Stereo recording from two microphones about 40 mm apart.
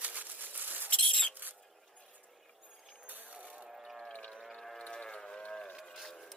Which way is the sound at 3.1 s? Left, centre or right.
Right.